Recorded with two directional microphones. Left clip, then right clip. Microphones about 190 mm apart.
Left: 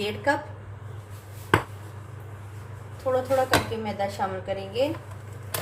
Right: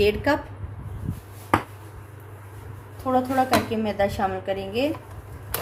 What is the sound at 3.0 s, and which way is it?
Speech, 60° right (ahead or behind).